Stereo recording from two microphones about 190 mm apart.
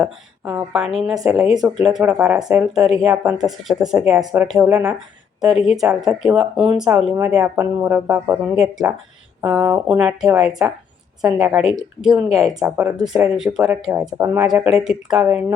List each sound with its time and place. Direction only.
0.0 s speech: 10° right (ahead or behind)